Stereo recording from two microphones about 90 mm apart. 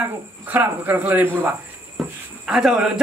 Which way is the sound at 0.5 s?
20° right (ahead or behind).